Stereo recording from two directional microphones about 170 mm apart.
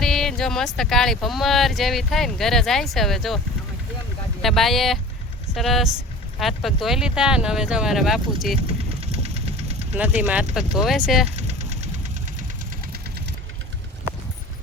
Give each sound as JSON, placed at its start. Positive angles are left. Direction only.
{"t": 0.0, "sound": "speech", "side_deg": 0}
{"t": 4.4, "sound": "speech", "side_deg": 0}
{"t": 9.1, "sound": "engine", "side_deg": -40}
{"t": 9.9, "sound": "speech", "side_deg": -10}
{"t": 11.3, "sound": "vehicle", "side_deg": -40}